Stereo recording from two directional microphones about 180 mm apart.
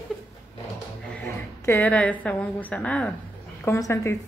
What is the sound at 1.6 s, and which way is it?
A woman's voice, 10° left (ahead or behind).